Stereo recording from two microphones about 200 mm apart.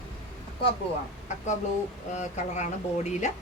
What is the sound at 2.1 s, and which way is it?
Speech, 35° left (ahead or behind).